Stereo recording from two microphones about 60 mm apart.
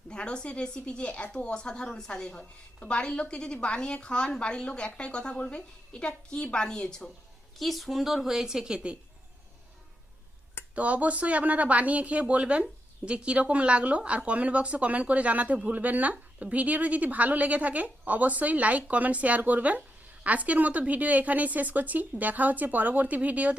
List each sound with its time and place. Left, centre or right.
0.1 s a woman's voice: centre
7.6 s a woman's voice: centre
10.8 s a woman's voice: right